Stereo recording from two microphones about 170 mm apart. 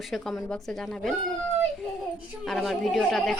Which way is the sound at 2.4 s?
Centre (ahead or behind).